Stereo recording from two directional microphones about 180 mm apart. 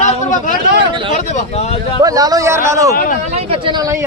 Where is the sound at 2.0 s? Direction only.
20° right (ahead or behind).